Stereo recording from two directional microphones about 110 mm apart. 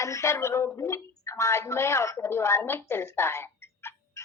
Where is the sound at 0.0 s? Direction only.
25° left (ahead or behind).